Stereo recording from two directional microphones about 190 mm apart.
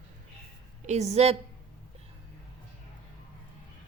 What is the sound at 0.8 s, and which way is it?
Speech, 35° right (ahead or behind).